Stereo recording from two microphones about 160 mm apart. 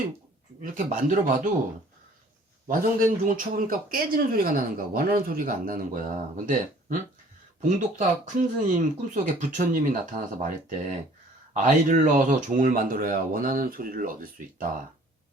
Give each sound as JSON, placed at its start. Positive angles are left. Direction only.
{"t": 0.6, "sound": "speech", "side_deg": -55}
{"t": 2.6, "sound": "speech", "side_deg": -55}